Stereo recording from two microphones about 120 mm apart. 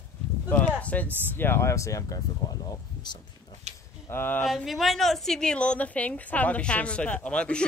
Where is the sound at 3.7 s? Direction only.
70° right (ahead or behind).